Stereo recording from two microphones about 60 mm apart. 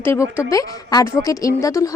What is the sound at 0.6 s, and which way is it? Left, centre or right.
Speech, left.